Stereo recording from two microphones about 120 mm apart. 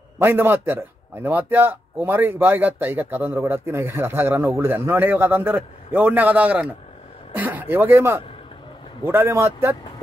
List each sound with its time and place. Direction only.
0.2 s a man's voice: 15° right (ahead or behind)